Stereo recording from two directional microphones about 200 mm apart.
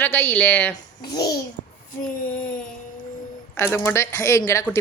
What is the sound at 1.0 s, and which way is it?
Speech, 20° left (ahead or behind).